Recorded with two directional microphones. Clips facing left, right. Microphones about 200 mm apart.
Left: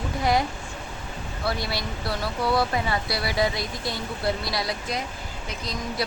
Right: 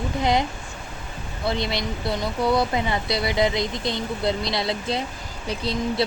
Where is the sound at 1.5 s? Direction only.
20° right (ahead or behind).